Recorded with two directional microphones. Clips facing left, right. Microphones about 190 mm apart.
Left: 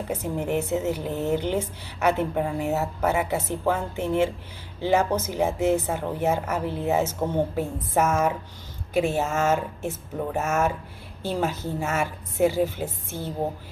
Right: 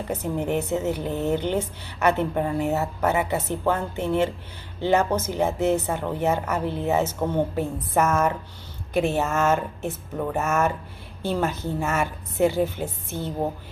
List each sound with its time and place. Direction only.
0.1 s a woman's voice: 5° left (ahead or behind)